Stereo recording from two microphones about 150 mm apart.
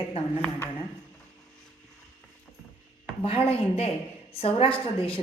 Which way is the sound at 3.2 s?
40° left (ahead or behind).